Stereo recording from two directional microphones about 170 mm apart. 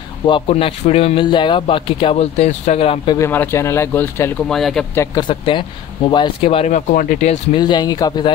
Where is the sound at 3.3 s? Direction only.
15° left (ahead or behind).